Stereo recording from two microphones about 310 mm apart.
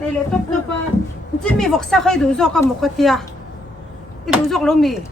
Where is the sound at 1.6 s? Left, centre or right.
Centre.